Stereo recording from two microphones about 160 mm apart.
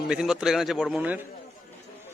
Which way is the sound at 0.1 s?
5° right (ahead or behind).